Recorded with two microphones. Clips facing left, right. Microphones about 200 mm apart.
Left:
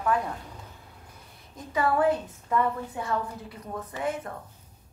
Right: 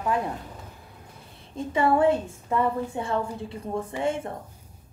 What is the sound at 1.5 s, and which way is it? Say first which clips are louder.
A woman's voice: right 4 dB; 25° right (ahead or behind).